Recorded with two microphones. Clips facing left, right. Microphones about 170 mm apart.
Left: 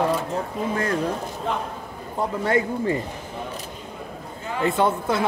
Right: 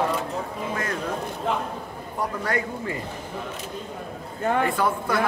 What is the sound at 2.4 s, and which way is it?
Speech, 25° left (ahead or behind).